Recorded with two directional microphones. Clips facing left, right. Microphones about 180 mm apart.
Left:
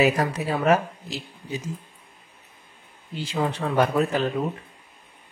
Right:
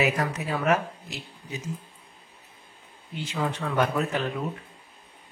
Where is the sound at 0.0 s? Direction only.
35° left (ahead or behind).